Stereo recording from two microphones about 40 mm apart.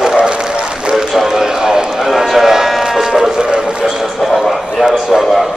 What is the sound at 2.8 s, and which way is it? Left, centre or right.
Music, centre.